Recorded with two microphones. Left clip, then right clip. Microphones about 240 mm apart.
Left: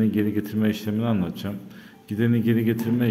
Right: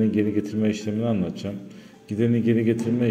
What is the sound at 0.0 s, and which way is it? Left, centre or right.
A man's voice, centre.